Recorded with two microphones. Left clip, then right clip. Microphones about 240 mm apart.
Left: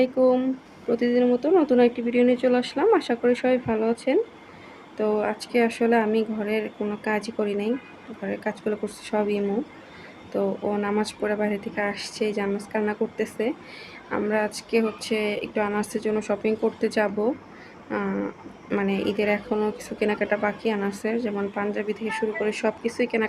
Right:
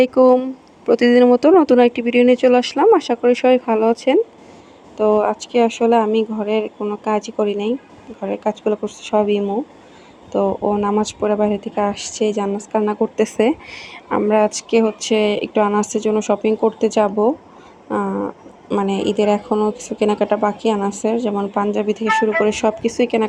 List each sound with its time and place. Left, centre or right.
0.0 s speech: right
17.8 s a sound: centre
18.7 s speech: right